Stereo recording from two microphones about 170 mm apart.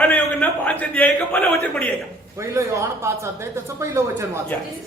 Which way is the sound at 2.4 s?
15° right (ahead or behind).